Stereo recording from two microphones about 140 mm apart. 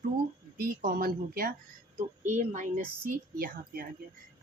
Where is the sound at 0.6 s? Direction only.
85° right.